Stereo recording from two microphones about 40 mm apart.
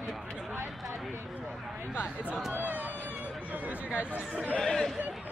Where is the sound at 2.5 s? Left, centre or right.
Right.